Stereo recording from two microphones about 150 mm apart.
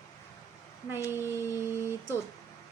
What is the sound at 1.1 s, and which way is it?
Speech, 15° right (ahead or behind).